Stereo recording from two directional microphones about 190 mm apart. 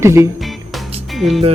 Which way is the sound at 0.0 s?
15° right (ahead or behind).